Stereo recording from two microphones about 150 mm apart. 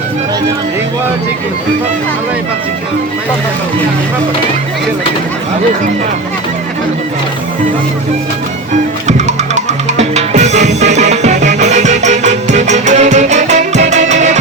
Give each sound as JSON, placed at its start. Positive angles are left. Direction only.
{"t": 9.0, "sound": "music", "side_deg": -50}